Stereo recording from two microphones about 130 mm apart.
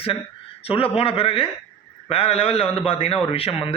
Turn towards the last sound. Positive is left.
turn(degrees=50)  # may be behind; listen again after turning